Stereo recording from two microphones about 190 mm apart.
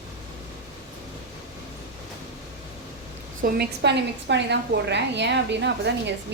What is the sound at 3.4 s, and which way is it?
A woman's voice, 60° right (ahead or behind).